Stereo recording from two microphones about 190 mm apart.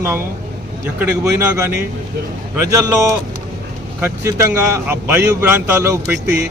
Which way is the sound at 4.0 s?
15° right (ahead or behind).